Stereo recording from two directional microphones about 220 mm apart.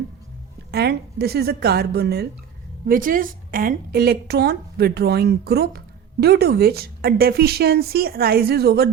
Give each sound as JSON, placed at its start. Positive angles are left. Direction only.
{"t": 0.7, "sound": "a woman's voice", "side_deg": -45}